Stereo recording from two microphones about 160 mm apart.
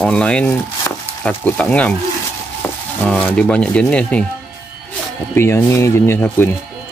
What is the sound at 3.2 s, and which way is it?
Speech, 10° left (ahead or behind).